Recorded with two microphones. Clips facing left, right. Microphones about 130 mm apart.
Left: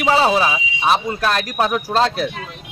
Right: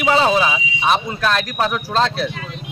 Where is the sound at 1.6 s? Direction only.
40° left (ahead or behind).